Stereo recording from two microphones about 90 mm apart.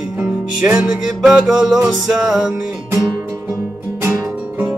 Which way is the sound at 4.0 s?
30° right (ahead or behind).